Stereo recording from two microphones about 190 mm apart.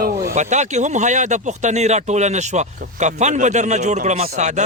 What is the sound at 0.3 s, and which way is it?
Speech, 40° right (ahead or behind).